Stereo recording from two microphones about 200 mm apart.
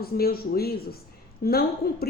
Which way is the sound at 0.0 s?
50° left (ahead or behind).